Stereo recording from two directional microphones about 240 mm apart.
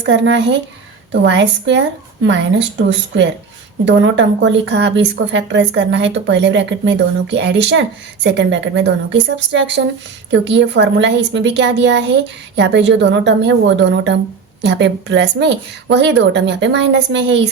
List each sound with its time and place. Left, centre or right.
0.1 s a woman's voice: right
3.8 s a woman's voice: right